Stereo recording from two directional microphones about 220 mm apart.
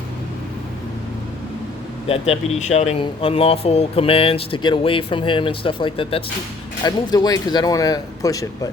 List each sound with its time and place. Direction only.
2.0 s speech: 25° left (ahead or behind)